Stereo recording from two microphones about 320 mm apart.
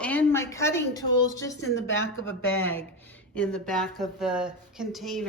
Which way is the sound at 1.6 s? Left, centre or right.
Left.